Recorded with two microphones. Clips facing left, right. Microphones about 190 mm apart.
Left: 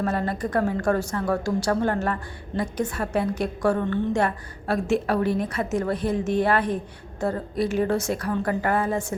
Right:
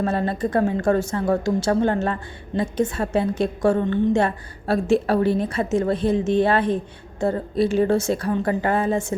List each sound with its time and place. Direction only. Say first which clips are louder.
0.0 s a woman's voice: right 3 dB; 25° right (ahead or behind)